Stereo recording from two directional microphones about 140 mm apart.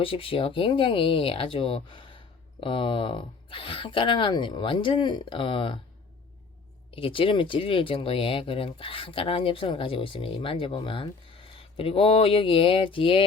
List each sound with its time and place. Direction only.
0.0 s speech: 40° left (ahead or behind)
6.9 s speech: 40° left (ahead or behind)